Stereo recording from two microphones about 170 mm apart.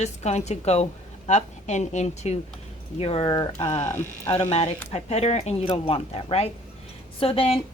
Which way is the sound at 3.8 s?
15° left (ahead or behind).